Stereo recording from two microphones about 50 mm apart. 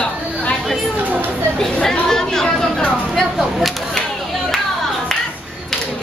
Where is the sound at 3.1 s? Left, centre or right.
Centre.